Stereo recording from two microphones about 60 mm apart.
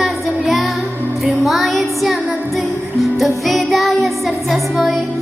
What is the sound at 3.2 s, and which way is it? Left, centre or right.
Music, centre.